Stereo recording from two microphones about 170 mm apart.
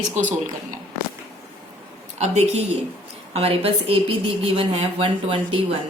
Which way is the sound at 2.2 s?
40° right (ahead or behind).